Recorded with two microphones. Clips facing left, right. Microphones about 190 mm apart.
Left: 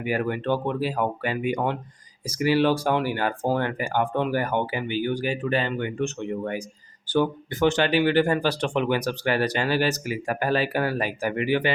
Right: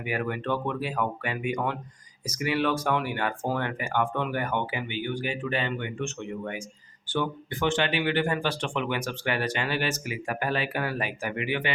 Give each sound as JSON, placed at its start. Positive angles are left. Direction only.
{"t": 0.0, "sound": "speech", "side_deg": 35}